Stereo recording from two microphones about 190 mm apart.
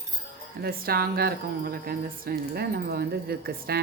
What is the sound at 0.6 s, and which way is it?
Speech, 50° right (ahead or behind).